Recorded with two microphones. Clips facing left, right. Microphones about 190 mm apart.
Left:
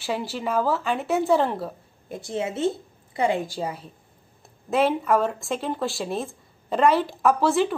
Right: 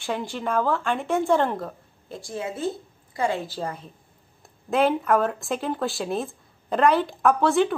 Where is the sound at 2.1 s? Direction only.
20° left (ahead or behind).